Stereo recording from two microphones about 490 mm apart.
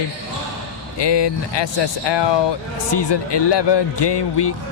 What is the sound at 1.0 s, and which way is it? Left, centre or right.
Speech, left.